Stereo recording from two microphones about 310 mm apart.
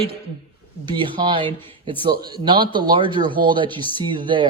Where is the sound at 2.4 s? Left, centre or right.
Centre.